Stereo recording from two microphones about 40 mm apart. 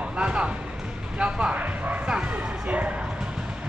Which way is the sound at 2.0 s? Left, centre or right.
Right.